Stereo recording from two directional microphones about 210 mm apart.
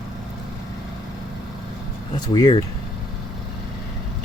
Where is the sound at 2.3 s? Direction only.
20° left (ahead or behind).